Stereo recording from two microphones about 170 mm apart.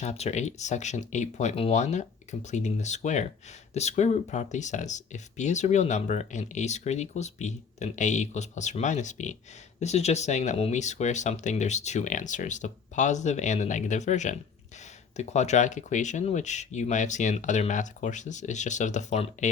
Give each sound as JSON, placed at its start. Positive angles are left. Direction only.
{"t": 0.0, "sound": "speech", "side_deg": 40}